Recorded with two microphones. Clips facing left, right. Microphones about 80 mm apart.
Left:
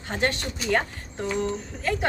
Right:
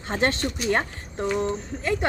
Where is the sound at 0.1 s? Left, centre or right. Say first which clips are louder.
Right 3 dB; right.